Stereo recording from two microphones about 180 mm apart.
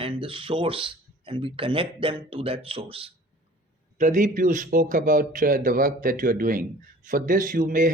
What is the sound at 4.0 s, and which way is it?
A man's voice, 45° right (ahead or behind).